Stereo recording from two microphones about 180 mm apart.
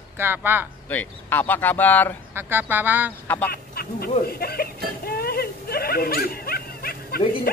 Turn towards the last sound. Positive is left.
turn(degrees=55)  # may be behind; listen again after turning